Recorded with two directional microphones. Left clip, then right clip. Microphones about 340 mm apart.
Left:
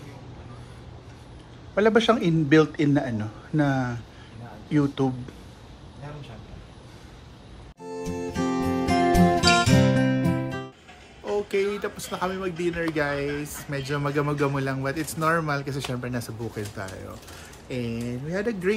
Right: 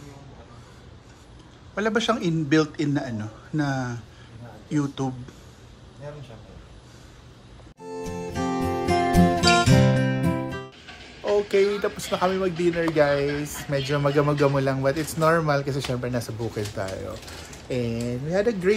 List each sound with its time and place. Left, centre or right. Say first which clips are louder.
1.8 s a man's voice: left 4 dB; centre
7.8 s music: left 1 dB; centre
11.2 s speech: right 5 dB; centre